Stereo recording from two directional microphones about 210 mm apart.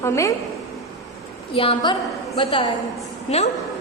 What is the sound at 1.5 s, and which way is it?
A woman's voice, 25° left (ahead or behind).